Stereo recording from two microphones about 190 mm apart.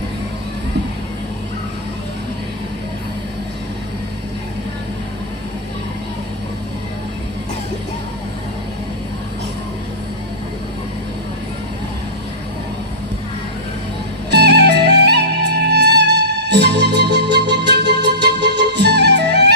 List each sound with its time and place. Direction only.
14.3 s music: 60° right (ahead or behind)